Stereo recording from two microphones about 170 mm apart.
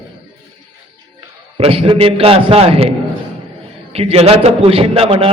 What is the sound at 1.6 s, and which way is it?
A man's voice, 35° right (ahead or behind).